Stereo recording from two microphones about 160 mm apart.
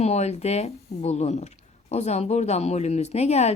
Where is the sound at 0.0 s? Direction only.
45° left (ahead or behind).